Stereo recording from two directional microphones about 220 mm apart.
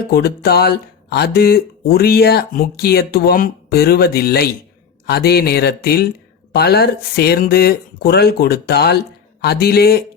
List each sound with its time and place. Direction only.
0.1 s speech: 45° left (ahead or behind)